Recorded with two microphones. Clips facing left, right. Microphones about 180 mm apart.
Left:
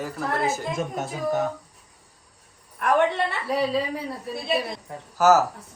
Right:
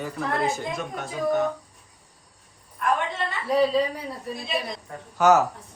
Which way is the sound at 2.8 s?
65° left (ahead or behind).